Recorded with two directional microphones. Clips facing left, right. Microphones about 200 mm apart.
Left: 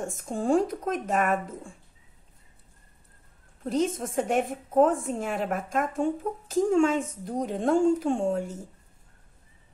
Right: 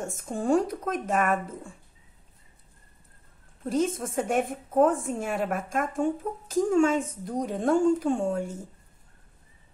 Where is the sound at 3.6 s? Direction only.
50° right (ahead or behind).